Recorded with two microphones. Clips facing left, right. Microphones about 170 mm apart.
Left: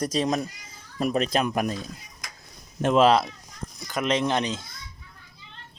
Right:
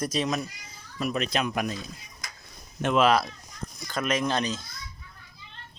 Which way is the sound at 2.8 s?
35° left (ahead or behind).